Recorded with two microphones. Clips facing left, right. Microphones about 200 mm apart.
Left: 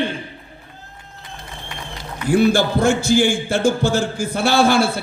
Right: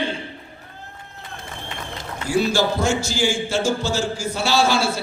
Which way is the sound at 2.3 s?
55° left (ahead or behind).